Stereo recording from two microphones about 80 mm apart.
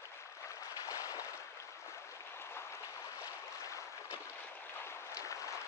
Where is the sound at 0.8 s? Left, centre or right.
Left.